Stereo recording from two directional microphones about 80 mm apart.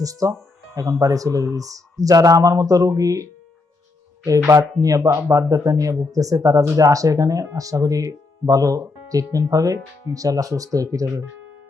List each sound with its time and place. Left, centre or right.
0.0 s speech: right